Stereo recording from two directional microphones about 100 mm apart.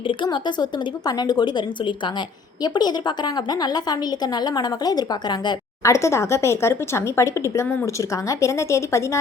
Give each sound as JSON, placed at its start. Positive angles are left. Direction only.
{"t": 0.1, "sound": "a woman's voice", "side_deg": 50}
{"t": 4.5, "sound": "a woman's voice", "side_deg": 45}
{"t": 5.8, "sound": "speech", "side_deg": 30}